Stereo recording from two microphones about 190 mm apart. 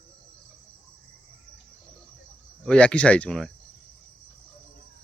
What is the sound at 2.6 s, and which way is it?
Speech, 5° left (ahead or behind).